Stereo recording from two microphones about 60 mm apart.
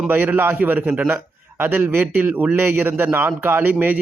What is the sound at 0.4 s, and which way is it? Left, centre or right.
Speech, right.